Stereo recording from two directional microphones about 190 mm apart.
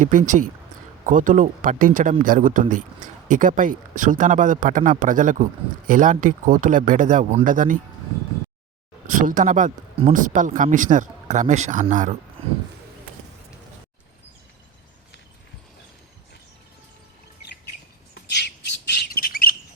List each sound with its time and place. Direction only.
0.0 s speech: 45° right (ahead or behind)
9.0 s speech: 45° right (ahead or behind)
18.1 s squawk: 60° left (ahead or behind)